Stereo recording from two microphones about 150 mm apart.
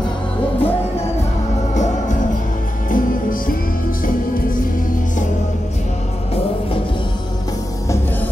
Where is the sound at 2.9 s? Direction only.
65° left (ahead or behind).